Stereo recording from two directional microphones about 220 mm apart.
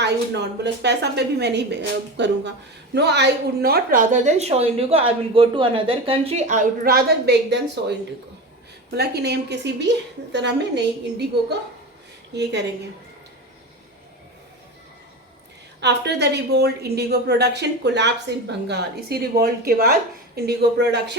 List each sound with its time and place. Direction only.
0.0 s a woman's voice: 50° right (ahead or behind)
12.3 s a woman's voice: 50° right (ahead or behind)
15.8 s a woman's voice: 50° right (ahead or behind)